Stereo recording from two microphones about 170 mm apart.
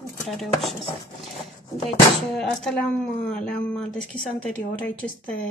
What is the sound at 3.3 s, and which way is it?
A woman's voice, 5° left (ahead or behind).